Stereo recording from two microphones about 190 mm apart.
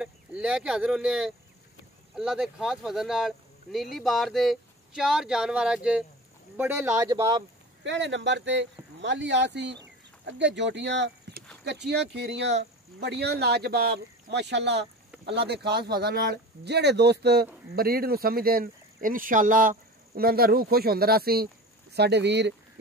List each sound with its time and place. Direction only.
0.0 s speech: 5° right (ahead or behind)
7.8 s speech: 70° right (ahead or behind)